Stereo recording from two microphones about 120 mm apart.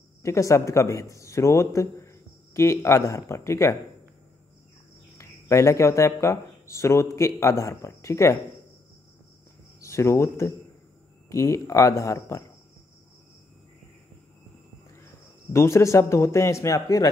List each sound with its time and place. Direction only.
0.2 s speech: 25° left (ahead or behind)
5.1 s speech: 25° left (ahead or behind)
9.8 s speech: 25° left (ahead or behind)
15.5 s speech: 20° left (ahead or behind)